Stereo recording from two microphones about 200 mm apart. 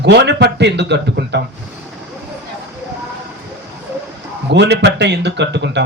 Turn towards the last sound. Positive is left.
turn(degrees=-60)  # may be behind; listen again after turning